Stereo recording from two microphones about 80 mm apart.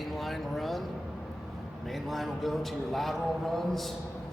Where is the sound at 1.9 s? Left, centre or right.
Centre.